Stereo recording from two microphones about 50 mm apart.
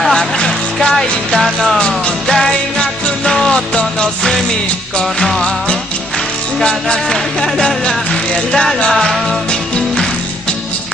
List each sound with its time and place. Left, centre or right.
0.0 s music: centre
0.4 s speech: centre
2.0 s music: centre
7.1 s music: centre
8.1 s speech: centre